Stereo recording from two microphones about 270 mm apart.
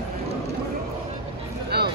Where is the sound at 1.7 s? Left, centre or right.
Right.